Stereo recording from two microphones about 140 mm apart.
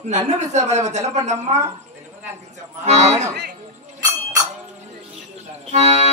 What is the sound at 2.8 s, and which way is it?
Speech, 50° right (ahead or behind).